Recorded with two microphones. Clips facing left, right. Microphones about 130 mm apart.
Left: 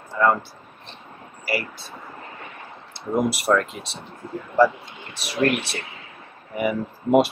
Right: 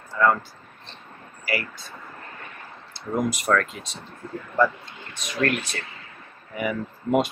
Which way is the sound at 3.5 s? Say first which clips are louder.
Left 1 dB; 20° left (ahead or behind).